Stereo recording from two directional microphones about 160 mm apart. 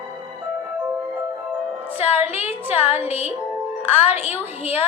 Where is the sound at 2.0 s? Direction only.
40° left (ahead or behind).